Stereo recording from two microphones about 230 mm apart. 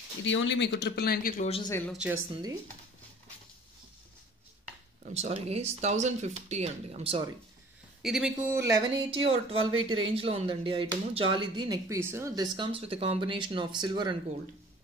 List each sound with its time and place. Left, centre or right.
0.2 s speech: left
1.5 s speech: centre
1.9 s a woman's voice: centre
5.1 s speech: right
8.0 s speech: centre; by 9.6 s right
9.6 s speech: right
10.1 s speech: right